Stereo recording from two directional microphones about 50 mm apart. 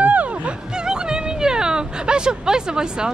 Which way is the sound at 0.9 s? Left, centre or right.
Centre.